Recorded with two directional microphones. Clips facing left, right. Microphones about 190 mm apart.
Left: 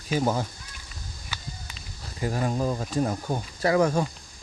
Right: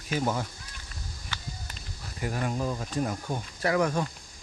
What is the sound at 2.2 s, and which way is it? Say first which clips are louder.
Speech: left 4 dB; 35° left (ahead or behind).